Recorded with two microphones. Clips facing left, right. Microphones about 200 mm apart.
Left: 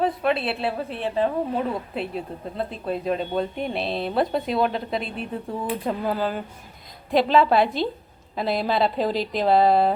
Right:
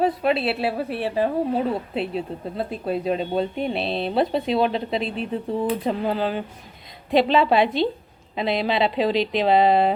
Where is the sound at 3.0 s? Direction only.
30° right (ahead or behind).